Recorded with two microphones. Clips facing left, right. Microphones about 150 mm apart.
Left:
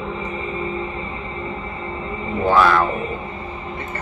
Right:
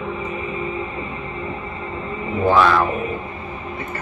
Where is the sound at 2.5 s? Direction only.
Centre (ahead or behind).